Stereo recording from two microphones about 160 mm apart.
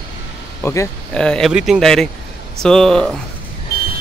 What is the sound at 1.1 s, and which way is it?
Speech, 5° left (ahead or behind).